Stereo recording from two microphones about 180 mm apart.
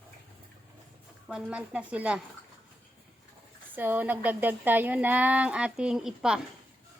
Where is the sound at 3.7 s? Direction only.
10° right (ahead or behind).